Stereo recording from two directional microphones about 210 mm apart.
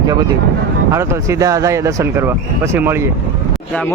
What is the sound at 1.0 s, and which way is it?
Speech, 15° right (ahead or behind).